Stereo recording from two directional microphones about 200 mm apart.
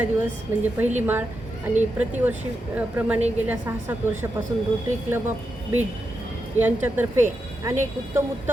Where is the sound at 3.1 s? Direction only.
35° right (ahead or behind).